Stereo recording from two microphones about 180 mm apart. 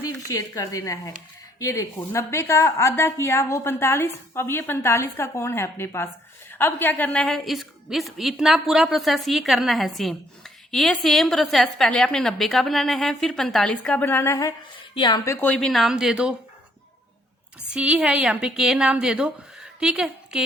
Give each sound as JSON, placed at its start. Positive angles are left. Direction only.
{"t": 0.3, "sound": "a woman's voice", "side_deg": 20}
{"t": 17.7, "sound": "a woman's voice", "side_deg": -5}